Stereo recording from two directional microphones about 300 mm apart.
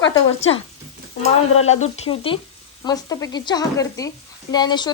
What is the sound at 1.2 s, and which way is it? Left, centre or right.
Frying, left.